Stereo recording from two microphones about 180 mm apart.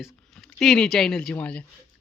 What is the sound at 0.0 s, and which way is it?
Speech, centre (ahead or behind).